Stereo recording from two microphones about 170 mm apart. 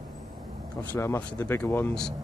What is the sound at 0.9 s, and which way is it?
Speech, 15° left (ahead or behind).